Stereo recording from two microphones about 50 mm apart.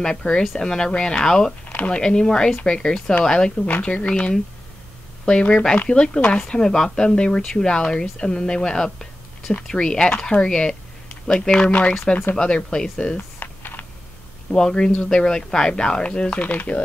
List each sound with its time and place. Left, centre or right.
0.0 s speech: centre
12.6 s speech: centre
13.4 s typing: left
14.5 s speech: centre; by 16.8 s left